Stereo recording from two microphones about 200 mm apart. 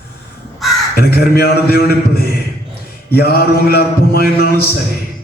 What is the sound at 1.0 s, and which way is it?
A man's voice, 50° left (ahead or behind).